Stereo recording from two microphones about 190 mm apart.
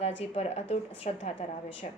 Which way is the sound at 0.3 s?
35° left (ahead or behind).